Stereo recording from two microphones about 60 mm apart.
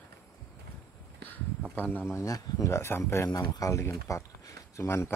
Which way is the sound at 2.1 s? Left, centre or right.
Left.